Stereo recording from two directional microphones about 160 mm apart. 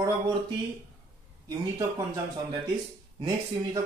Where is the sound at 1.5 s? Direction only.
20° right (ahead or behind).